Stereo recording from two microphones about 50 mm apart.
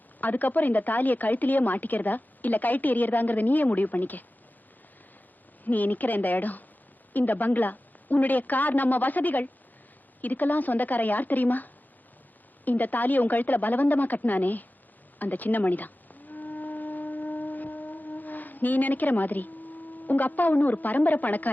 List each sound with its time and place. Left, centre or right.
0.2 s speech: left
5.6 s speech: left
15.2 s music: left